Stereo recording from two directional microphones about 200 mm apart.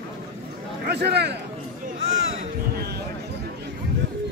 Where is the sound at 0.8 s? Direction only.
55° right (ahead or behind).